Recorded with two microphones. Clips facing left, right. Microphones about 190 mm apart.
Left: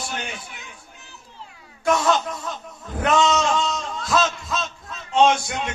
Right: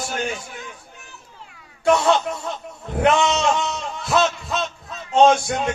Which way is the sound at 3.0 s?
25° right (ahead or behind).